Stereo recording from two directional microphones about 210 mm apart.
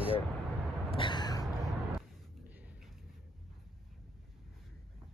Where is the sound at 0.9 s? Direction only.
20° left (ahead or behind).